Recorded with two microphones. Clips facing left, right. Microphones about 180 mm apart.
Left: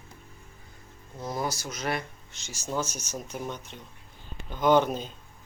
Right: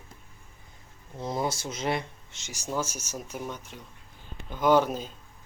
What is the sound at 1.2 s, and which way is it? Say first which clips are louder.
Speech: right 2 dB; 25° right (ahead or behind).